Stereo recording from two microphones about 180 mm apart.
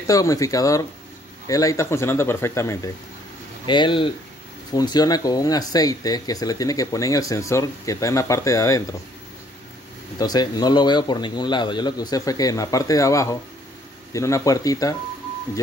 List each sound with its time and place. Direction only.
0.0 s speech: 20° left (ahead or behind)
3.6 s speech: 25° left (ahead or behind)
10.1 s speech: 20° left (ahead or behind)